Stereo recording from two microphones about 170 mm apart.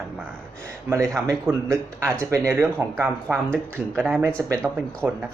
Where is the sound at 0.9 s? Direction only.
15° right (ahead or behind).